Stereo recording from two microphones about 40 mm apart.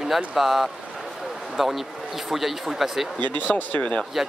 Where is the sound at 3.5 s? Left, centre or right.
Left.